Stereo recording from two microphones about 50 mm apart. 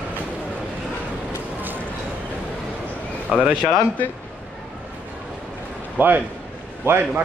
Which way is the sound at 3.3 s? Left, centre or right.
Centre.